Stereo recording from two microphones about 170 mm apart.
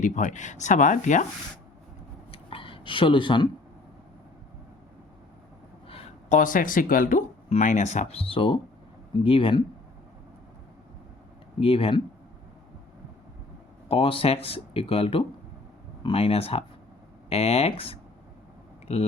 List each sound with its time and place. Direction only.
0.0 s speech: 50° left (ahead or behind)
2.3 s a sound: 30° left (ahead or behind)
5.9 s speech: 35° left (ahead or behind)
11.6 s speech: 35° left (ahead or behind)
13.8 s speech: 35° left (ahead or behind)